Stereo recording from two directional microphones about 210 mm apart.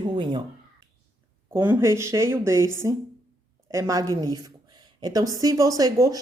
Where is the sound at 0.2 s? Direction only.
20° right (ahead or behind).